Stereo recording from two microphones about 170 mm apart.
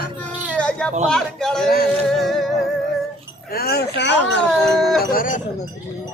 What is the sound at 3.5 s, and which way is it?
Speech, 65° left (ahead or behind).